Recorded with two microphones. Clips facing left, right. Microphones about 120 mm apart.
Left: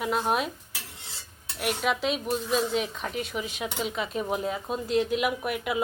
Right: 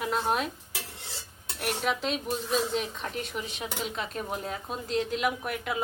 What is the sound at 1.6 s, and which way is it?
Speech, 5° left (ahead or behind).